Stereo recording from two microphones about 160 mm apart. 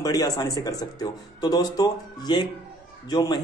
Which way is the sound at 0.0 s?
25° left (ahead or behind).